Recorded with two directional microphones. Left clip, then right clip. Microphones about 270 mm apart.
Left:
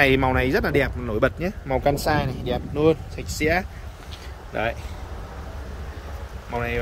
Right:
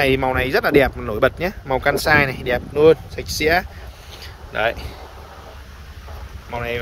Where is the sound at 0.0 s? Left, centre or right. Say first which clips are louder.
Right 1 dB; centre.